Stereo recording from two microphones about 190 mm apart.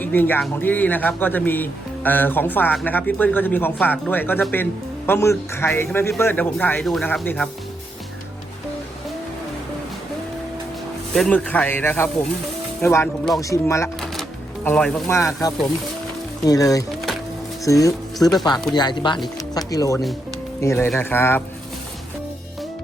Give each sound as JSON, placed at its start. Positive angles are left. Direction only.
{"t": 0.0, "sound": "speech", "side_deg": 10}
{"t": 11.1, "sound": "speech", "side_deg": 5}
{"t": 14.0, "sound": "music", "side_deg": 5}
{"t": 16.5, "sound": "speech", "side_deg": 20}